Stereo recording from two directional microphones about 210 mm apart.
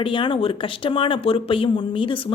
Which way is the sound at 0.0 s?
25° left (ahead or behind).